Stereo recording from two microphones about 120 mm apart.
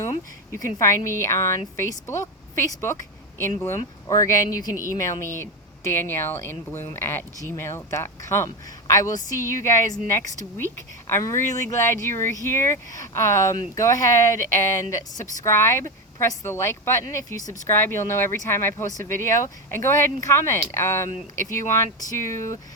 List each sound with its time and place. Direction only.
0.5 s speech: 25° left (ahead or behind)